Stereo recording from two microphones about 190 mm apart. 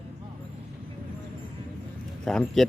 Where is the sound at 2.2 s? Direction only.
5° left (ahead or behind).